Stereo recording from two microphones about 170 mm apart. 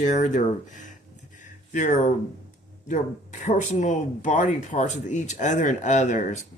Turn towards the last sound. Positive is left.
turn(degrees=50)  # may be behind; listen again after turning